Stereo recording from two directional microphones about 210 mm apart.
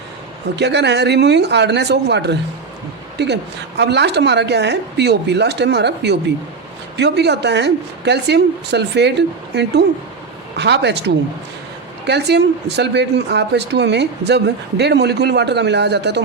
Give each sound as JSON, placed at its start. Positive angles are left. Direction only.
{"t": 0.5, "sound": "speech", "side_deg": -55}
{"t": 12.0, "sound": "speech", "side_deg": -55}